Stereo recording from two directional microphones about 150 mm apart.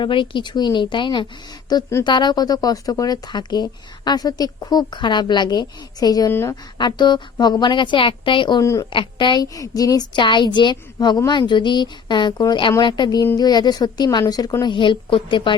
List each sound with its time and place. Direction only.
0.0 s a woman's voice: 35° left (ahead or behind)
1.7 s speech: 20° left (ahead or behind)
2.0 s speech: 30° left (ahead or behind)
6.7 s a woman's voice: 30° left (ahead or behind)
8.6 s speech: 20° left (ahead or behind)
8.9 s a woman's voice: 35° left (ahead or behind)